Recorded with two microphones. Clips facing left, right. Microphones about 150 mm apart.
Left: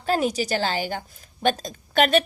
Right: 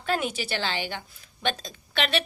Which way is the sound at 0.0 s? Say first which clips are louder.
Left 5 dB; 40° left (ahead or behind).